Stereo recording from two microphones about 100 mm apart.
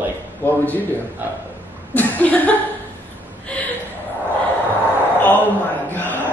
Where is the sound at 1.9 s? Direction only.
15° left (ahead or behind).